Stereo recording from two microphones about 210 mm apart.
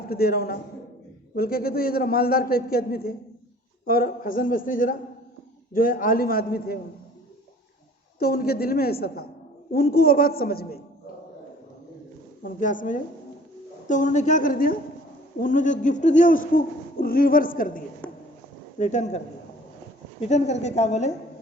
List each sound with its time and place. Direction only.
0.1 s a man's voice: 45° left (ahead or behind)
8.2 s a man's voice: 45° left (ahead or behind)
12.4 s a man's voice: 40° left (ahead or behind)
20.2 s a man's voice: 30° left (ahead or behind)